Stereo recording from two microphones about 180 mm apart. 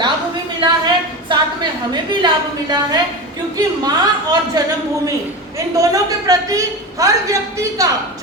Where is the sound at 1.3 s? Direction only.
25° right (ahead or behind).